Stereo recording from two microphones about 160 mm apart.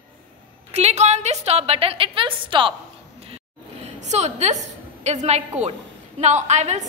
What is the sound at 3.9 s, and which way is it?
A woman's voice, 45° right (ahead or behind).